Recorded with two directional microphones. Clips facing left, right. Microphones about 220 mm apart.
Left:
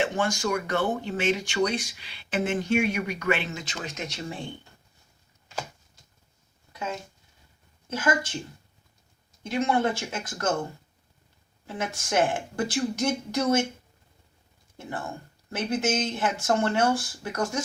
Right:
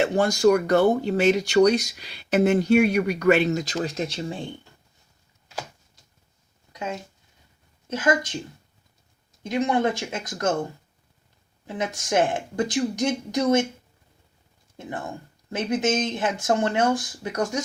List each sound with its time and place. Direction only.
0.0 s speech: 40° right (ahead or behind)
7.9 s speech: 20° right (ahead or behind)
9.5 s speech: 20° right (ahead or behind)
11.6 s speech: 20° right (ahead or behind)
14.8 s speech: 20° right (ahead or behind)